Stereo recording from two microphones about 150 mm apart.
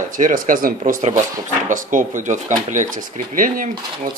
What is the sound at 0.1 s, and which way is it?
Speech, 65° right (ahead or behind).